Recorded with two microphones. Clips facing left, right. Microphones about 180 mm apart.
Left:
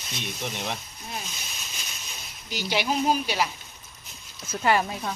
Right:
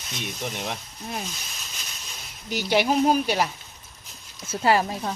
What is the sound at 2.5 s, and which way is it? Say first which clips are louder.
Speech: right 5 dB; 55° right (ahead or behind).